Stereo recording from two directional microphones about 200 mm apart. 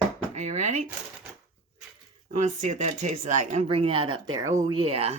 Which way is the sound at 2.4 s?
35° right (ahead or behind).